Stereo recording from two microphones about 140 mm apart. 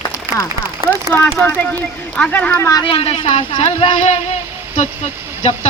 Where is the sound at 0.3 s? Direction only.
15° right (ahead or behind).